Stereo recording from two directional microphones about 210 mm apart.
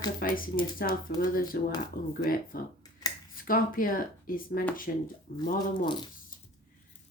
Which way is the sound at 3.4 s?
40° left (ahead or behind).